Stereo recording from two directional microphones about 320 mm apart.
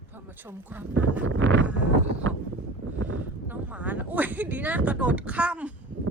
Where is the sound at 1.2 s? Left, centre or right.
Right.